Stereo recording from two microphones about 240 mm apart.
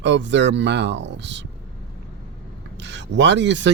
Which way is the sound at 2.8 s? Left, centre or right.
Right.